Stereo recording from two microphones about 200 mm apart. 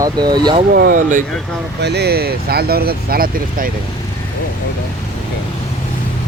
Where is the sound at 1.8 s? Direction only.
55° right (ahead or behind).